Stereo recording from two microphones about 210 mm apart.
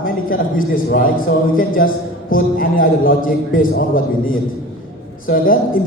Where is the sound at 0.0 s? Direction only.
40° left (ahead or behind).